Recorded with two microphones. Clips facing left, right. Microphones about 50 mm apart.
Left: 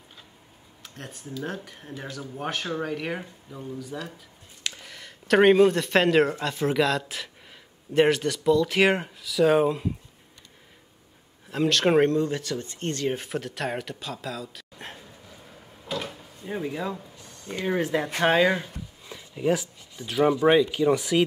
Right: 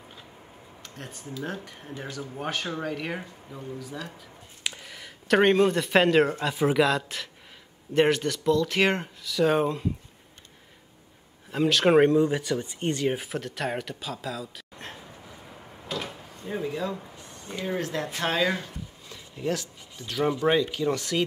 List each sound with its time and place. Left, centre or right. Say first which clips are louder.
0.8 s speech: left 1 dB; centre
11.5 s speech: right 1 dB; centre
15.0 s a sound: right 2 dB; centre
15.9 s door: left 1 dB; centre
16.3 s speech: even; centre
17.1 s a sound: right 3 dB; right
17.5 s speech: left 4 dB; centre
18.6 s a sound: left 1 dB; centre
20.2 s speech: left 4 dB; centre